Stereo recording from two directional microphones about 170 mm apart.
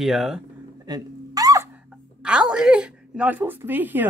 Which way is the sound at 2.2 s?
5° right (ahead or behind).